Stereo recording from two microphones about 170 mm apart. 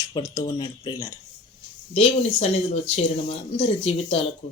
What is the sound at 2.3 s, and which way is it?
Speech, 40° left (ahead or behind).